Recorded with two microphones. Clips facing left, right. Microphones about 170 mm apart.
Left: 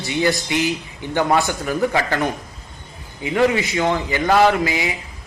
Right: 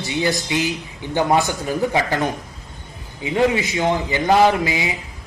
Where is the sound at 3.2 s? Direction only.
20° right (ahead or behind).